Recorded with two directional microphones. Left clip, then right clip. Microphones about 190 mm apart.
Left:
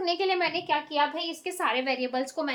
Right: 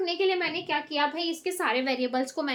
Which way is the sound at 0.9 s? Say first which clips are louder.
Even; centre (ahead or behind).